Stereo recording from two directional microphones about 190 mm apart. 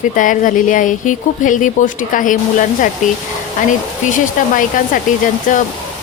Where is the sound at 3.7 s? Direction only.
45° left (ahead or behind).